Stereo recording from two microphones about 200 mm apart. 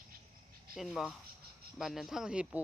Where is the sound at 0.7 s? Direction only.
Centre (ahead or behind).